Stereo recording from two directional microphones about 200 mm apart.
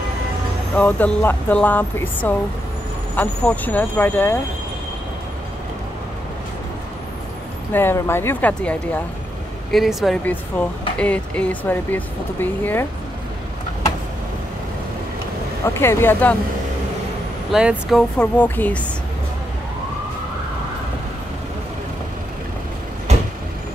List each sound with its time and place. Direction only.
0.7 s speech: 5° left (ahead or behind)
7.7 s speech: 10° left (ahead or behind)
15.6 s speech: 15° left (ahead or behind)
17.5 s speech: centre (ahead or behind)